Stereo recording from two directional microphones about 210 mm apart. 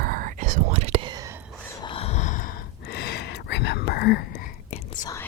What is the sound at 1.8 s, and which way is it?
Gasp, 25° left (ahead or behind).